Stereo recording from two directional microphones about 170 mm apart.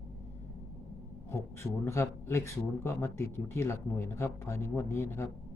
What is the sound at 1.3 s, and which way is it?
Speech, 15° left (ahead or behind).